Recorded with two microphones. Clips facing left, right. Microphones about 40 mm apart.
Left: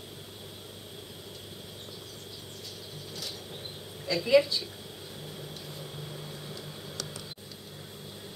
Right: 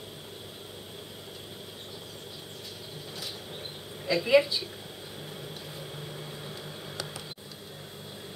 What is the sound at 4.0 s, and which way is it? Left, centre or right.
Speech, centre.